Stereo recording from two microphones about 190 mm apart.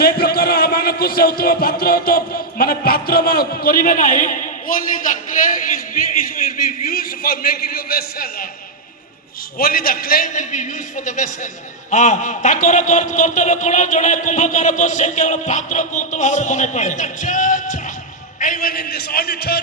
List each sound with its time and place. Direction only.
0.0 s speech: 55° left (ahead or behind)
9.6 s a man's voice: 50° left (ahead or behind)